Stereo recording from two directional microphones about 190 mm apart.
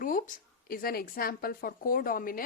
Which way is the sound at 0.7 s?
50° left (ahead or behind).